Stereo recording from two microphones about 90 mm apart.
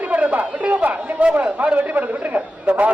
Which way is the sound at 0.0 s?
15° right (ahead or behind).